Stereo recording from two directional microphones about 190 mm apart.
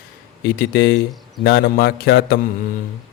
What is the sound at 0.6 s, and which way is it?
A man's voice, 60° left (ahead or behind).